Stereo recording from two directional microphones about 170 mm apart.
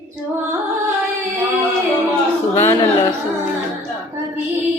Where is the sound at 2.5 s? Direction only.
15° left (ahead or behind).